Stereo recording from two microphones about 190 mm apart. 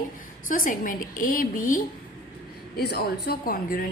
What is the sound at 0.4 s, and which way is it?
A woman's voice, 45° left (ahead or behind).